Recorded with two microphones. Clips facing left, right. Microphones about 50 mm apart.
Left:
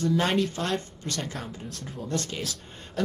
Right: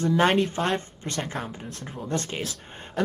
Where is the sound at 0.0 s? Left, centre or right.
Right.